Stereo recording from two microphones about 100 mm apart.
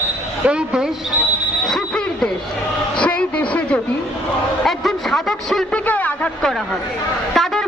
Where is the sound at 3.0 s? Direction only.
15° left (ahead or behind).